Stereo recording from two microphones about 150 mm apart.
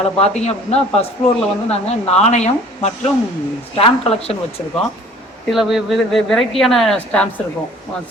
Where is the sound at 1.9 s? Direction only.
45° left (ahead or behind).